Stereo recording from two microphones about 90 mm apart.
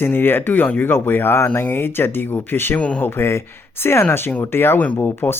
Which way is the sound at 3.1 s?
25° left (ahead or behind).